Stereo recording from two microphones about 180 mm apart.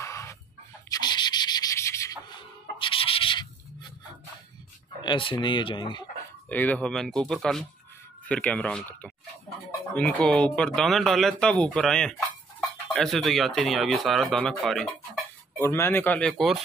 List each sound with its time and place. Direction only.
0.0 s a sound: 15° left (ahead or behind)
0.8 s sanding: 20° left (ahead or behind)
5.0 s speech: 30° left (ahead or behind)
6.5 s speech: 10° left (ahead or behind)
15.6 s speech: 15° left (ahead or behind)